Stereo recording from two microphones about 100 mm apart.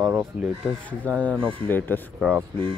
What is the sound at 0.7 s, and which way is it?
Speech, 15° left (ahead or behind).